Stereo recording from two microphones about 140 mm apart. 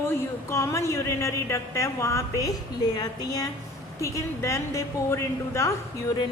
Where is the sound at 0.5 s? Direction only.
20° left (ahead or behind).